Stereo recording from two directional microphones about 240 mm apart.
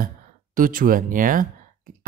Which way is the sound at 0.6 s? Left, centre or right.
Right.